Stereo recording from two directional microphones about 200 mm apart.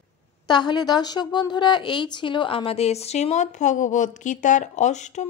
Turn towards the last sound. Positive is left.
turn(degrees=35)  # may be behind; listen again after turning